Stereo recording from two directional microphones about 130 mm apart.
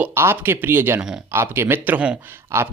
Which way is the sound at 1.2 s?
20° right (ahead or behind).